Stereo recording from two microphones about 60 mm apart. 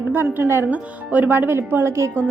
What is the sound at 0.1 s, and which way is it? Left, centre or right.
Speech, right.